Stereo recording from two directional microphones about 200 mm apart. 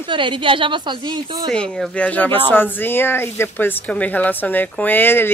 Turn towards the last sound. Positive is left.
turn(degrees=10)  # may be behind; listen again after turning